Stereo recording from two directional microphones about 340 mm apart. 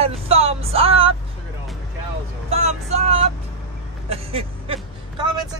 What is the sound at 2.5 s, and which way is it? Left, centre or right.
Vehicle, centre.